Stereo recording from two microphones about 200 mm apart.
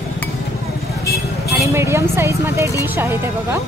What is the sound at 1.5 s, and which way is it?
Speech, 15° right (ahead or behind).